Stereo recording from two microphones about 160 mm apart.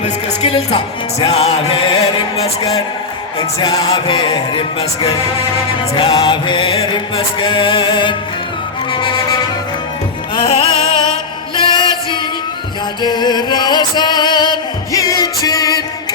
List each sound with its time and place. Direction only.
0.0 s music: 40° left (ahead or behind)
3.6 s music: 25° left (ahead or behind)
10.4 s music: 40° left (ahead or behind)